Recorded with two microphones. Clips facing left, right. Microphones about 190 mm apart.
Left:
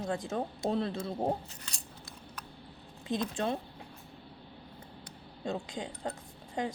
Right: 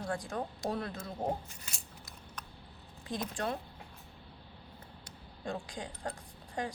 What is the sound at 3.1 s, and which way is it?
Speech, 25° left (ahead or behind).